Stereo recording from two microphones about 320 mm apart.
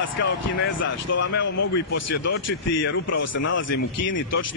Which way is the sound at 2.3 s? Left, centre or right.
Left.